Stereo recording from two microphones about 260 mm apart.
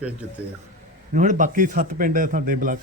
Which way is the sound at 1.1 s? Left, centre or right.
Right.